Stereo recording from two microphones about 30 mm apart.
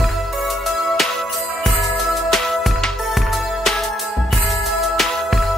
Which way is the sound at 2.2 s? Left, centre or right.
Centre.